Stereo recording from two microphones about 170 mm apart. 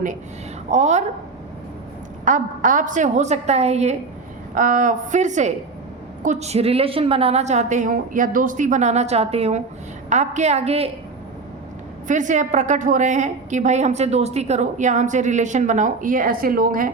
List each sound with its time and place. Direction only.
0.7 s a woman's voice: 40° right (ahead or behind)
2.2 s a woman's voice: 50° right (ahead or behind)
4.5 s a woman's voice: 50° right (ahead or behind)
12.0 s a woman's voice: 50° right (ahead or behind)